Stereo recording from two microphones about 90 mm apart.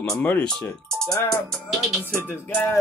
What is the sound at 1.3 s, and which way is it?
Speech, centre (ahead or behind).